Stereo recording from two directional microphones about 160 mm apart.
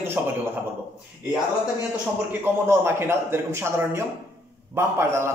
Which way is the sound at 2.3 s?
15° right (ahead or behind).